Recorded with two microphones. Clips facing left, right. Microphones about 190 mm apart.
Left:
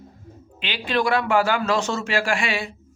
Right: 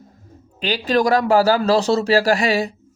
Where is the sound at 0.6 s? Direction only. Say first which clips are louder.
Right 6 dB; 40° right (ahead or behind).